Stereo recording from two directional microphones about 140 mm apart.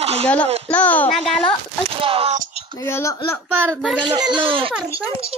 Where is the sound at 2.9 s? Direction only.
20° left (ahead or behind).